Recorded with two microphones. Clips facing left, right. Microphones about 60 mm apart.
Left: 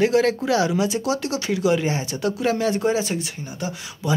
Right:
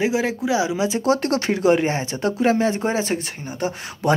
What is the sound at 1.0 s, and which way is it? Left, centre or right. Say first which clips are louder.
Speech: right 5 dB; right.